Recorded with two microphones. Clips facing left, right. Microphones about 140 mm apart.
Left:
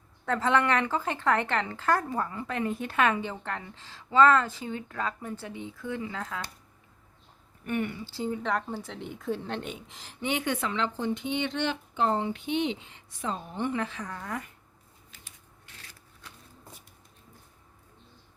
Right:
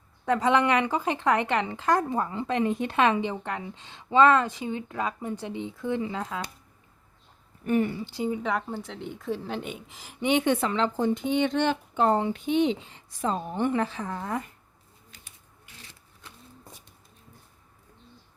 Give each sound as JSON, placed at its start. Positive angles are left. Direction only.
{"t": 0.3, "sound": "a woman's voice", "side_deg": -15}
{"t": 7.6, "sound": "speech", "side_deg": -30}
{"t": 8.0, "sound": "speech", "side_deg": -15}
{"t": 10.2, "sound": "a woman's voice", "side_deg": -20}
{"t": 10.4, "sound": "a woman's voice", "side_deg": -30}
{"t": 10.7, "sound": "speech", "side_deg": -45}
{"t": 13.7, "sound": "a woman's voice", "side_deg": -30}